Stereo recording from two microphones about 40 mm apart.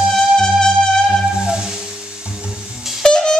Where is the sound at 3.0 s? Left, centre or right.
Left.